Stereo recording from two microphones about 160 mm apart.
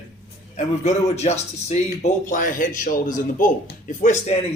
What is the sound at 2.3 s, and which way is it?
A man's voice, 55° left (ahead or behind).